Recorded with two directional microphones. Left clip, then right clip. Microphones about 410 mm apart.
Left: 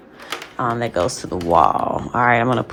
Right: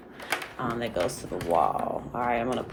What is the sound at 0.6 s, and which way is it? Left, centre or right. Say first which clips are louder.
Speech: left 11 dB; centre.